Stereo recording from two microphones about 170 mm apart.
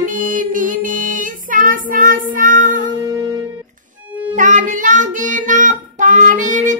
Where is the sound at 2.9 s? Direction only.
20° right (ahead or behind).